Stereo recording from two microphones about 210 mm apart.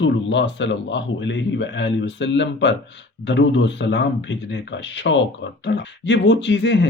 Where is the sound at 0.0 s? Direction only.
60° left (ahead or behind).